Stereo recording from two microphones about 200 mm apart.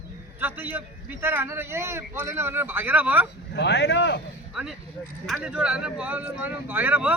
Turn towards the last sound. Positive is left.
turn(degrees=-5)  # may be behind; listen again after turning